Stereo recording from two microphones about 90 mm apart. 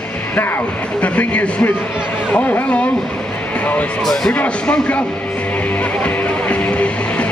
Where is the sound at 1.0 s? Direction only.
15° left (ahead or behind).